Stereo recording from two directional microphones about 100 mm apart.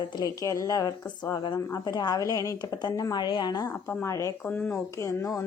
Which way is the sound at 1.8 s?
40° left (ahead or behind).